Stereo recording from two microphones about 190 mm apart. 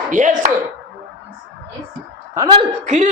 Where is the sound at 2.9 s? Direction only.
35° right (ahead or behind).